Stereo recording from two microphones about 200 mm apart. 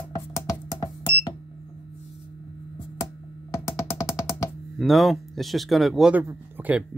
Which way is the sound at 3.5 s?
15° left (ahead or behind).